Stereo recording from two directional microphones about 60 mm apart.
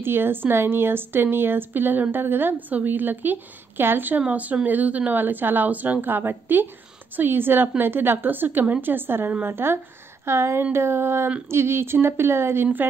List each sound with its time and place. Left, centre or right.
0.0 s a woman's voice: right